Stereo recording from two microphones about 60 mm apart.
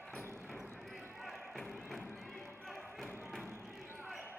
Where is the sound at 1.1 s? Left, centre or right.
Centre.